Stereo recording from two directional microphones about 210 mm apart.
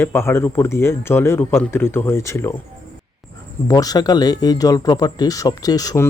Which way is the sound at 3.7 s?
15° left (ahead or behind).